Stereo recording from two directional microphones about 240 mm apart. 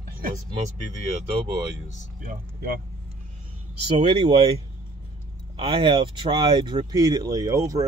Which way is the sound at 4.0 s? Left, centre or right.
Right.